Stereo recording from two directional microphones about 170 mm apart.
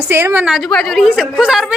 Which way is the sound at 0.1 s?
15° right (ahead or behind).